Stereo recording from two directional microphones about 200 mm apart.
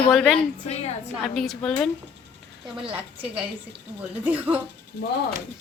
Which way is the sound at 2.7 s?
25° right (ahead or behind).